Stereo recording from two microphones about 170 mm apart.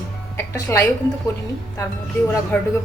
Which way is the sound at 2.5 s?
10° left (ahead or behind).